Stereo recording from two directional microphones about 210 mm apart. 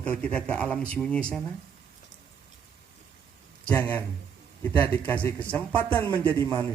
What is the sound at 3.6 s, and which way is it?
Speech, 10° left (ahead or behind).